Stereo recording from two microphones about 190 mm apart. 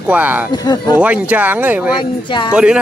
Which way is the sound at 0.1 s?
10° right (ahead or behind).